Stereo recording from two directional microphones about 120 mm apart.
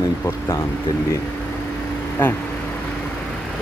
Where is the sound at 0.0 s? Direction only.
25° left (ahead or behind).